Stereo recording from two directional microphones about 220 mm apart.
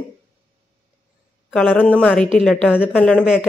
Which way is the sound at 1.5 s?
5° left (ahead or behind).